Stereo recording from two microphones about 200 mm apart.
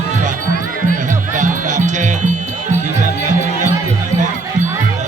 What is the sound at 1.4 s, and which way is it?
Music, 40° right (ahead or behind).